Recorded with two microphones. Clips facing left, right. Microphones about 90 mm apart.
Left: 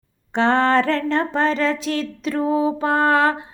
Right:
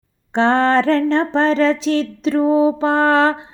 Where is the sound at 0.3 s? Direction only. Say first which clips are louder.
Right 2 dB; 30° right (ahead or behind).